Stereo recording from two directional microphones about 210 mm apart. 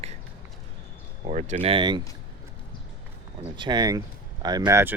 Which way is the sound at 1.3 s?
35° right (ahead or behind).